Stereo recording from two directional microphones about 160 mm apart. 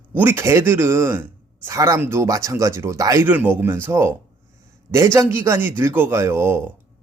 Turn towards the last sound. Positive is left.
turn(degrees=-15)  # may be behind; listen again after turning